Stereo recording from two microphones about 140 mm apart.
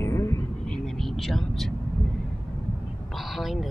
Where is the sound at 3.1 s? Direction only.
Centre (ahead or behind).